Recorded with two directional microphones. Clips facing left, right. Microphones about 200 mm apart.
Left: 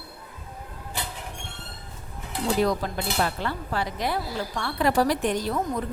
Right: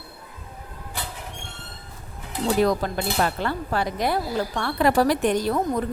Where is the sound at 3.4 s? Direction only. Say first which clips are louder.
Right 4 dB; 50° right (ahead or behind).